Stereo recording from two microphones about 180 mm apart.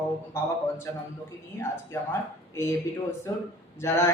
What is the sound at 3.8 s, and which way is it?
Speech, 15° left (ahead or behind).